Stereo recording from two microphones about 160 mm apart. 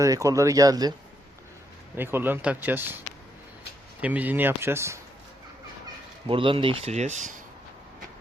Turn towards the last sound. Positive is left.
turn(degrees=-50)  # may be behind; listen again after turning